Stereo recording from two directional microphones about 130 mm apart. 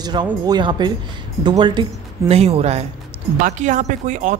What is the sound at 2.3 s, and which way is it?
Speech, 50° right (ahead or behind).